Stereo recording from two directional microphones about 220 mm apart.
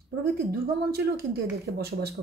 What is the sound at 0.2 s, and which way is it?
A woman's voice, 45° right (ahead or behind).